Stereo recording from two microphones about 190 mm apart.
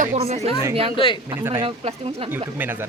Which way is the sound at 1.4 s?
10° right (ahead or behind).